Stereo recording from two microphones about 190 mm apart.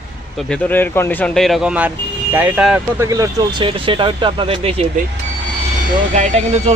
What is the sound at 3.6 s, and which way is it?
Speech, 25° right (ahead or behind).